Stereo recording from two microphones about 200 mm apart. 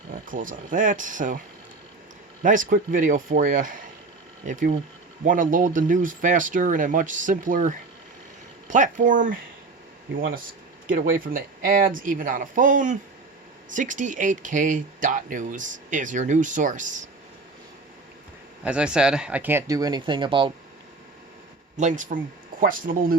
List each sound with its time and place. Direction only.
0.1 s speech: 45° right (ahead or behind)
2.4 s speech: 40° right (ahead or behind)
10.8 s speech: 45° right (ahead or behind)
18.6 s speech: 5° right (ahead or behind); by 20.5 s 25° right (ahead or behind)
21.8 s speech: 40° right (ahead or behind)